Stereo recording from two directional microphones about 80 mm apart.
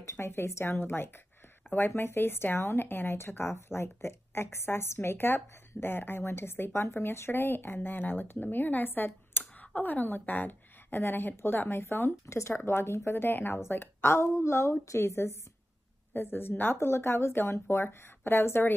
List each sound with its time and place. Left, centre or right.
0.0 s a woman's voice: left